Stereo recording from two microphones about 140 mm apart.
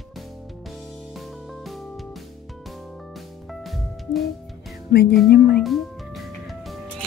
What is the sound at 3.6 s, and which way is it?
Music, centre (ahead or behind).